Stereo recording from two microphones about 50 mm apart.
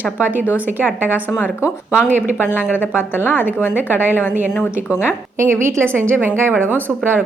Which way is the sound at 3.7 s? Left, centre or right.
Right.